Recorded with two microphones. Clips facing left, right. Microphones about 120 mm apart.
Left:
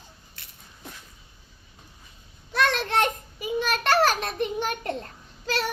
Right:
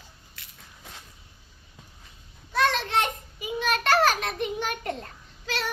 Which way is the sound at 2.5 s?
60° left (ahead or behind).